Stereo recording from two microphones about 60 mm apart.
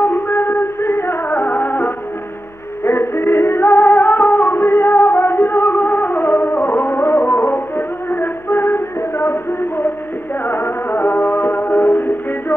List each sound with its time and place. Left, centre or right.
0.0 s music: left
1.4 s music: left